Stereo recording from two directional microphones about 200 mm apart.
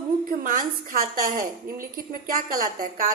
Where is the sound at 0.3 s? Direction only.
45° right (ahead or behind).